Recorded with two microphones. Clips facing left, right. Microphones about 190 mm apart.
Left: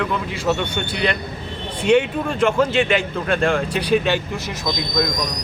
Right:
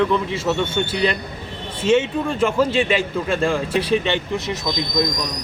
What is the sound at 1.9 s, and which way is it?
Speech, centre (ahead or behind).